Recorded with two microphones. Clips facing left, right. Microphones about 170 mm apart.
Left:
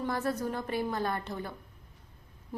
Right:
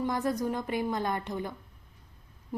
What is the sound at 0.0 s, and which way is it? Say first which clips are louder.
A woman's voice: right 2 dB; 15° right (ahead or behind).